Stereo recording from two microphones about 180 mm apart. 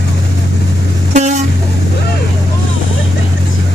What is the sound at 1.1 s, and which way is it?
Vehicle, 40° right (ahead or behind).